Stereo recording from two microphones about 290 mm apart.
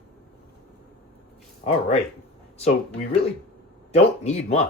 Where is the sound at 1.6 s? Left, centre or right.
Left.